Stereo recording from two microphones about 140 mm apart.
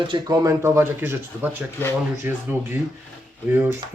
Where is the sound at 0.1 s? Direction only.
30° right (ahead or behind).